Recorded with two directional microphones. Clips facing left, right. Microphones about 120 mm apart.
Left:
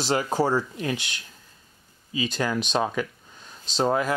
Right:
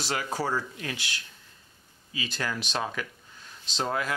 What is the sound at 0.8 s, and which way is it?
Speech, 25° left (ahead or behind).